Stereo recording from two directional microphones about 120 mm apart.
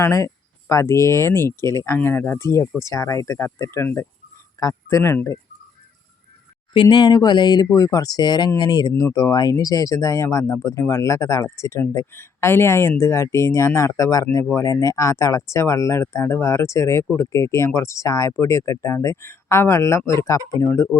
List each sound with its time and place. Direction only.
0.0 s speech: 25° left (ahead or behind)
6.7 s speech: 40° left (ahead or behind); by 21.0 s 20° left (ahead or behind)